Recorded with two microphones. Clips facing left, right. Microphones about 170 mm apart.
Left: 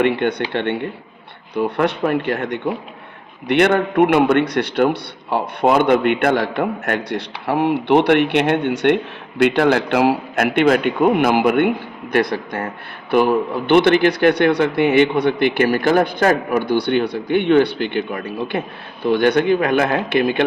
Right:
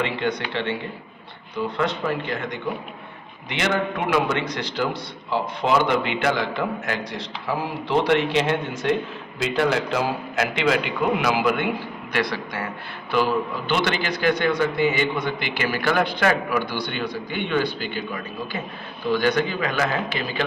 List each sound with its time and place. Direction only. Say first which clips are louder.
0.0 s a man's voice: left 7 dB; 60° left (ahead or behind)